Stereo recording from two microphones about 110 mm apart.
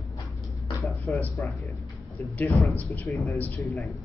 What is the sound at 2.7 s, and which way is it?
Speech, 15° left (ahead or behind).